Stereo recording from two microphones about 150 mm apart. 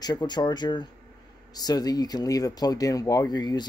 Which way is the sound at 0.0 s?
30° left (ahead or behind).